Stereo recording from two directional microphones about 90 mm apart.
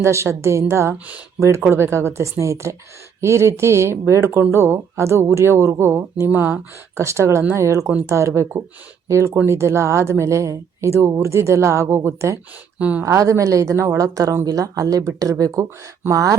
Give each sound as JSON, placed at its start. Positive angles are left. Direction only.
{"t": 0.0, "sound": "a woman's voice", "side_deg": -30}